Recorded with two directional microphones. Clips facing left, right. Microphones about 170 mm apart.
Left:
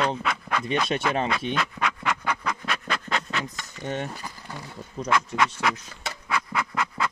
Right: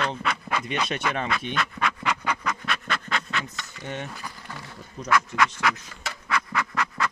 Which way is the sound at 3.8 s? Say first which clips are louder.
Left 4 dB; 50° left (ahead or behind).